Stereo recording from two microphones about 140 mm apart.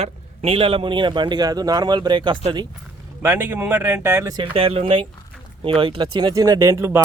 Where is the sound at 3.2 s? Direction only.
15° right (ahead or behind).